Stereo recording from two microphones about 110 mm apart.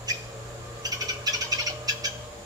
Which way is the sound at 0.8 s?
35° right (ahead or behind).